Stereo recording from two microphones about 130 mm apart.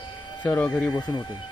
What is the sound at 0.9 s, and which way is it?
Speech, 35° left (ahead or behind).